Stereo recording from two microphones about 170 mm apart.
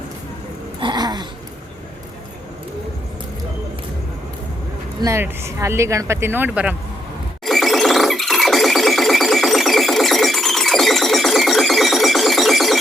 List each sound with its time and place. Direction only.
0.8 s a sound: 25° right (ahead or behind)
4.9 s speech: 15° right (ahead or behind)
7.4 s music: centre (ahead or behind)